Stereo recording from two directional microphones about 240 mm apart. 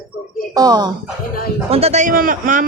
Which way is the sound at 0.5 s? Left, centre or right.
Centre.